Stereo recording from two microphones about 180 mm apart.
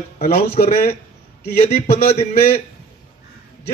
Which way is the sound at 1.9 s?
35° left (ahead or behind).